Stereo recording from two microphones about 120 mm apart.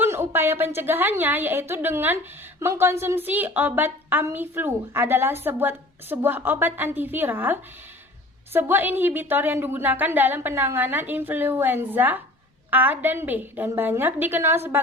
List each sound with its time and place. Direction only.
0.0 s a woman's voice: 20° right (ahead or behind)